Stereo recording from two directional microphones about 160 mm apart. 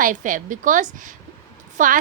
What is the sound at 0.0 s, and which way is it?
A woman's voice, 55° right (ahead or behind).